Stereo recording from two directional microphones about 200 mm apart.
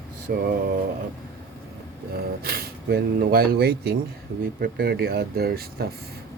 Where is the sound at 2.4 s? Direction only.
50° right (ahead or behind).